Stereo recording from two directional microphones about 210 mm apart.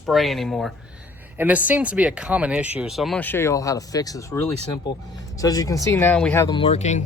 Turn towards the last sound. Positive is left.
turn(degrees=35)  # may be behind; listen again after turning